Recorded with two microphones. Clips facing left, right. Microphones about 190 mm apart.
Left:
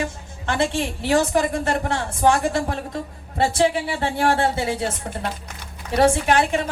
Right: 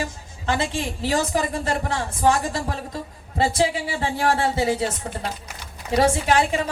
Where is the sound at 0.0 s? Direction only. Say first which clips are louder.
Left 1 dB; 60° left (ahead or behind).